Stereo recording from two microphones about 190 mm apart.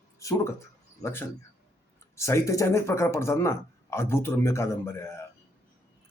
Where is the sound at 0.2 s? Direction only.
15° left (ahead or behind).